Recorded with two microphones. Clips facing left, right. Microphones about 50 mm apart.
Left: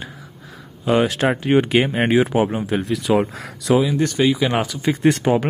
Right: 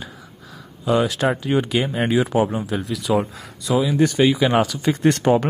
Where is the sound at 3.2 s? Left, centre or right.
Left.